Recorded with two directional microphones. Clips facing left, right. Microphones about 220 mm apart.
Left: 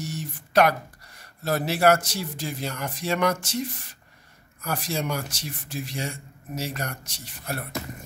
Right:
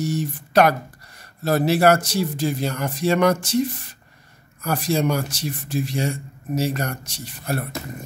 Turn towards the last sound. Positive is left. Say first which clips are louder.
# right 7 dB
turn(degrees=-35)  # may be behind; listen again after turning